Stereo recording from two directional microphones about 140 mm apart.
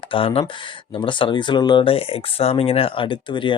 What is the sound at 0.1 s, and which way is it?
Speech, 40° left (ahead or behind).